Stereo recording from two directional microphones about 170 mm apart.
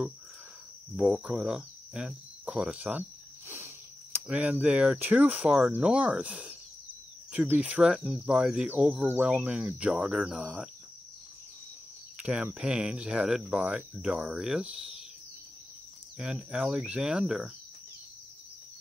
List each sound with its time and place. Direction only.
0.9 s speech: 5° right (ahead or behind)
12.2 s speech: 5° right (ahead or behind)
16.2 s speech: 5° right (ahead or behind)